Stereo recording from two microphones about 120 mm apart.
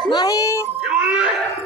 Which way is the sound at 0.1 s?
30° left (ahead or behind).